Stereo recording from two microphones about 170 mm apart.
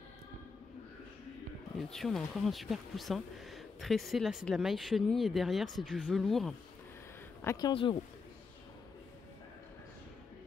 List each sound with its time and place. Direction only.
1.8 s speech: centre (ahead or behind)
7.4 s speech: 25° left (ahead or behind)